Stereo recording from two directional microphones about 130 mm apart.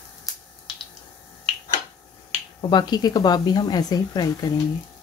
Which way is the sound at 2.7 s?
35° left (ahead or behind).